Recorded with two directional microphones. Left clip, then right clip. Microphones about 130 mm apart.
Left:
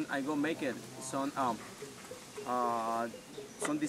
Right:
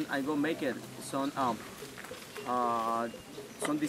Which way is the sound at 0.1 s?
5° right (ahead or behind).